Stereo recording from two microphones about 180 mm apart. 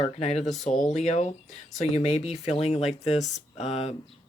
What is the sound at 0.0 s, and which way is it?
Speech, 35° left (ahead or behind).